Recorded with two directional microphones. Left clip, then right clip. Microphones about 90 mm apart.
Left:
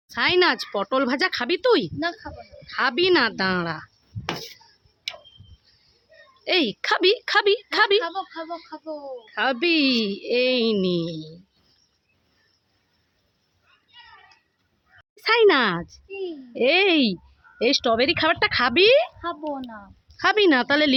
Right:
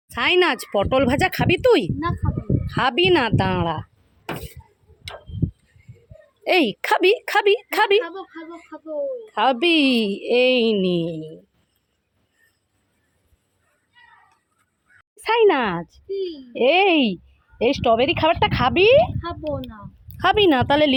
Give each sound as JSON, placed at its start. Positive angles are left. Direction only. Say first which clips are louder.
{"t": 0.1, "sound": "speech", "louder": "right 1 dB", "side_deg": -20}
{"t": 6.4, "sound": "speech", "louder": "right 3 dB", "side_deg": -35}
{"t": 9.2, "sound": "speech", "louder": "right 3 dB", "side_deg": -30}
{"t": 15.1, "sound": "speech", "louder": "even", "side_deg": 5}
{"t": 16.1, "sound": "a woman's voice", "louder": "right 4 dB", "side_deg": 50}
{"t": 16.5, "sound": "a woman's voice", "louder": "right 2 dB", "side_deg": -5}
{"t": 19.2, "sound": "a woman's voice", "louder": "right 2 dB", "side_deg": 55}
{"t": 20.1, "sound": "a woman's voice", "louder": "right 2 dB", "side_deg": -5}